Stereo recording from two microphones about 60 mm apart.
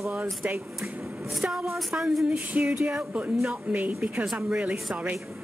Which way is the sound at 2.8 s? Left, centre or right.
Right.